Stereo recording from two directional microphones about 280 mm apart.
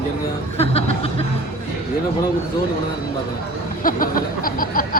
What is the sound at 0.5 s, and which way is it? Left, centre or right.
Music, left.